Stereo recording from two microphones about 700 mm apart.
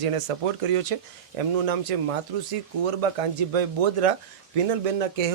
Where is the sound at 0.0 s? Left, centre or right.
Right.